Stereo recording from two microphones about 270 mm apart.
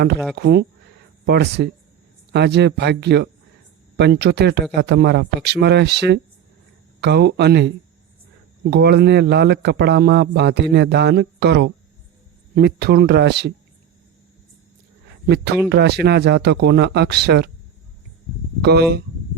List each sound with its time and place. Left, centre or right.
0.3 s a man's voice: right
8.7 s a man's voice: right
15.7 s a man's voice: right
18.6 s a man's voice: right